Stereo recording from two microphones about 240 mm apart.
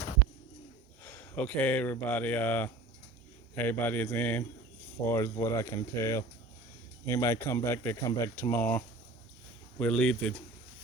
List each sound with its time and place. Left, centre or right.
1.0 s speech: centre